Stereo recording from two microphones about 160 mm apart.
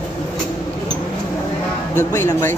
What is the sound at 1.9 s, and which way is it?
Speech, 15° left (ahead or behind).